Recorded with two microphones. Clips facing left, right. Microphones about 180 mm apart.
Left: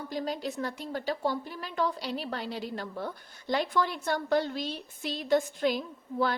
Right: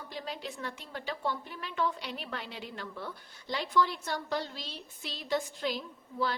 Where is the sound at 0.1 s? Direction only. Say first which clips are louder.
Left 7 dB; 40° left (ahead or behind).